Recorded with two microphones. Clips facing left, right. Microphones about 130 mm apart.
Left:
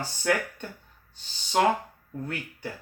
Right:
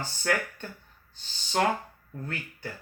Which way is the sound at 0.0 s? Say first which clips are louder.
Left 2 dB; 15° left (ahead or behind).